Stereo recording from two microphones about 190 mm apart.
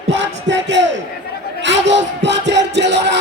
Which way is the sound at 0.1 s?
70° right (ahead or behind).